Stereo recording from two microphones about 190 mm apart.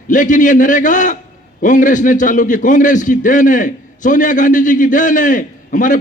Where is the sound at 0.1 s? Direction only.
45° left (ahead or behind).